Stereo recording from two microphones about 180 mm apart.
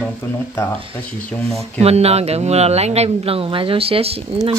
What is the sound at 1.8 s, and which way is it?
Speech, 35° right (ahead or behind).